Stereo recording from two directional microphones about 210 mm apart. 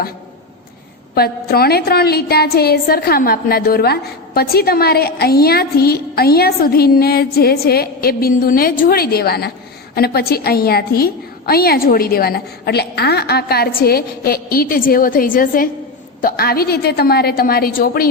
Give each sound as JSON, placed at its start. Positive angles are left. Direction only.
{"t": 1.1, "sound": "a woman's voice", "side_deg": 45}